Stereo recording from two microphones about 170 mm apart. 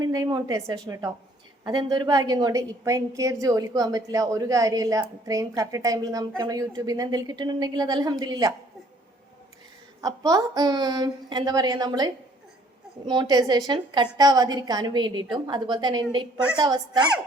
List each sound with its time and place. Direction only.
0.0 s a woman's voice: 25° right (ahead or behind)
10.0 s a woman's voice: 20° right (ahead or behind)